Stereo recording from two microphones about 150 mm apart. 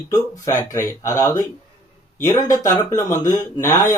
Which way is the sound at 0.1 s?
20° left (ahead or behind).